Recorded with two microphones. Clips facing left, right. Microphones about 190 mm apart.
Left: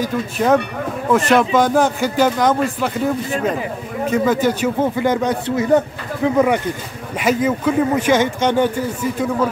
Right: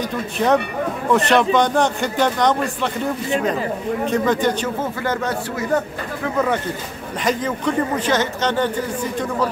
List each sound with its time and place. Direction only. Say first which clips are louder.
0.0 s speech: left 2 dB; centre (ahead or behind)